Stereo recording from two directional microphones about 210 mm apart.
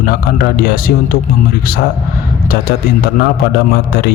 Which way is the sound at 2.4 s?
45° left (ahead or behind).